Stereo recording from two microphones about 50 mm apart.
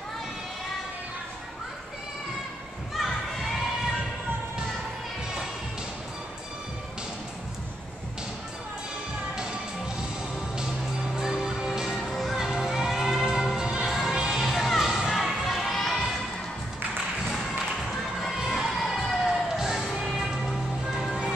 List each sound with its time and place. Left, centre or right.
9.3 s music: centre
11.1 s music: centre
13.6 s music: centre
13.8 s music: centre
14.8 s a sound: centre
18.5 s crowd: centre
19.5 s music: centre